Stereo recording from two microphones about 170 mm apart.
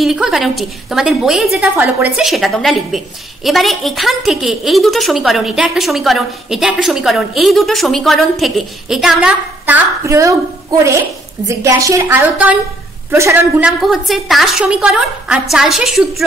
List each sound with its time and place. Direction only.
0.0 s a woman's voice: centre (ahead or behind)
13.7 s a woman's voice: centre (ahead or behind)